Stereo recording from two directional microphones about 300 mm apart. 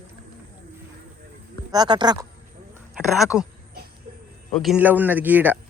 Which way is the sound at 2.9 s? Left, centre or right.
Centre.